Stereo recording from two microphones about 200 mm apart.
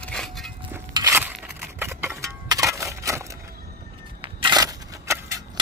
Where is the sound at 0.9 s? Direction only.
15° right (ahead or behind).